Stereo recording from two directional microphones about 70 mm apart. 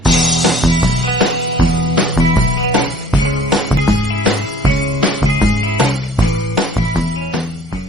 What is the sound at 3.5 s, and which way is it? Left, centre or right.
Music, centre.